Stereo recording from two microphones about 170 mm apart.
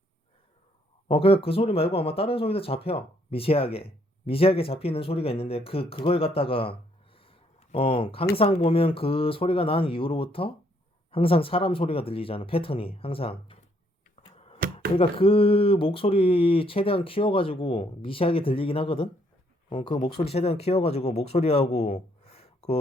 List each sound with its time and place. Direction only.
1.0 s speech: 35° left (ahead or behind)
14.2 s a sound: 35° left (ahead or behind)
14.9 s speech: 35° left (ahead or behind)